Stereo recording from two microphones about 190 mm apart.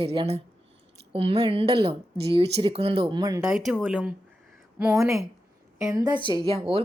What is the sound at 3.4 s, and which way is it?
A woman's voice, centre (ahead or behind).